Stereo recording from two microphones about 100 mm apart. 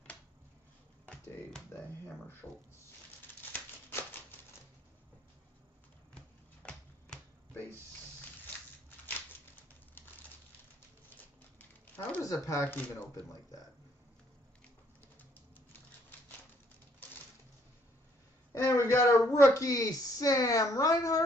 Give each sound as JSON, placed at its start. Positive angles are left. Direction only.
{"t": 2.4, "sound": "speech", "side_deg": 25}
{"t": 3.5, "sound": "a sound", "side_deg": 20}
{"t": 6.6, "sound": "finger snapping", "side_deg": 10}
{"t": 11.1, "sound": "a sound", "side_deg": 15}
{"t": 12.2, "sound": "speech", "side_deg": 35}
{"t": 12.6, "sound": "speech", "side_deg": 20}
{"t": 18.5, "sound": "a man's voice", "side_deg": 30}
{"t": 19.2, "sound": "speech", "side_deg": 20}
{"t": 19.5, "sound": "speech", "side_deg": 40}